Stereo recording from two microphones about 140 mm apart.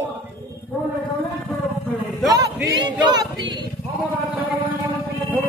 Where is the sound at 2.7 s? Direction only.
30° right (ahead or behind).